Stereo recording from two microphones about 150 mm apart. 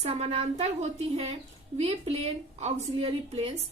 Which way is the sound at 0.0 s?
45° right (ahead or behind).